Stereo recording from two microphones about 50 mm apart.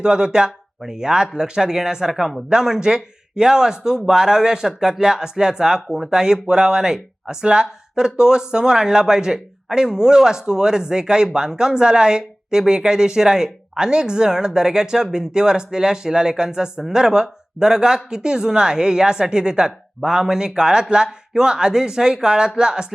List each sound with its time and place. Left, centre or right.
0.0 s speech: centre